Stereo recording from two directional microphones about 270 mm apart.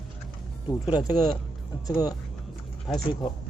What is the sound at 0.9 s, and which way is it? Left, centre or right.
Speech, centre.